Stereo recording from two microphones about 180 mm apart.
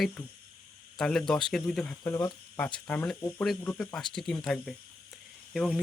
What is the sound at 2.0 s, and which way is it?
Speech, 20° left (ahead or behind).